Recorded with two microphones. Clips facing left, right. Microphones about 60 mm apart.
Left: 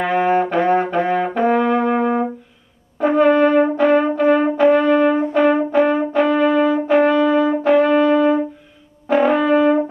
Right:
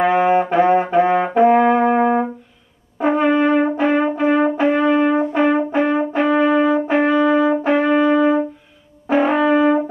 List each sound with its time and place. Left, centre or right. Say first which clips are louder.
0.1 s brass instrument: right 1 dB; centre
9.0 s music: even; right